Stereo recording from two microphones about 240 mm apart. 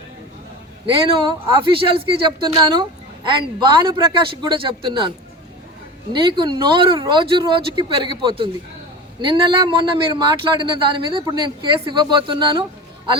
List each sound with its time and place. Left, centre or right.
1.3 s speech: right
6.1 s speech: centre